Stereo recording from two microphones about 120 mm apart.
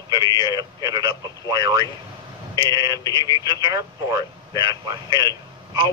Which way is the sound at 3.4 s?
35° right (ahead or behind).